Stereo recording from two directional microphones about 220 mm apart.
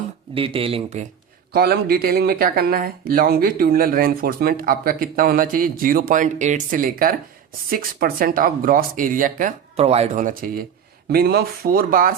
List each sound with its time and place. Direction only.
0.3 s speech: 25° right (ahead or behind)
1.5 s speech: 45° right (ahead or behind)